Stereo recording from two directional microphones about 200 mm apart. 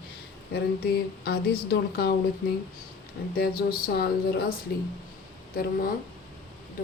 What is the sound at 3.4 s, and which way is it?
Speech, 50° left (ahead or behind).